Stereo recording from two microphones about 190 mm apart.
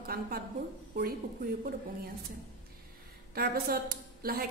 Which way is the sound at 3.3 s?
55° right (ahead or behind).